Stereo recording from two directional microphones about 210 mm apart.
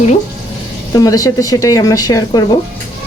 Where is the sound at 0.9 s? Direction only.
15° left (ahead or behind).